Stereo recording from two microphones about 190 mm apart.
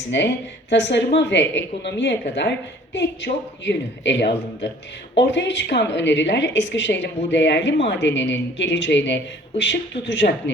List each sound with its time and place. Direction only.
0.1 s speech: 65° left (ahead or behind)